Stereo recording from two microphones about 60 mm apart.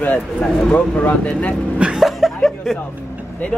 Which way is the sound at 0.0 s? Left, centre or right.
Left.